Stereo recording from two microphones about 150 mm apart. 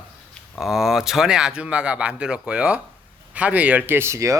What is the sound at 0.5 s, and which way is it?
A man's voice, centre (ahead or behind).